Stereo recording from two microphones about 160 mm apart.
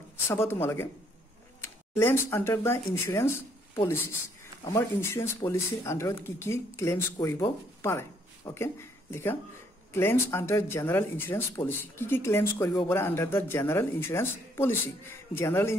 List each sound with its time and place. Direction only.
0.3 s speech: 15° left (ahead or behind)